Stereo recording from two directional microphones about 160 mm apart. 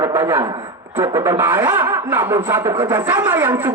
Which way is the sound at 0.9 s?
15° right (ahead or behind).